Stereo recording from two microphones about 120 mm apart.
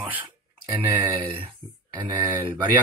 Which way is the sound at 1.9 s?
35° right (ahead or behind).